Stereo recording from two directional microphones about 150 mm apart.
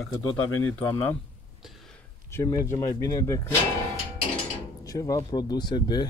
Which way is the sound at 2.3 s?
20° left (ahead or behind).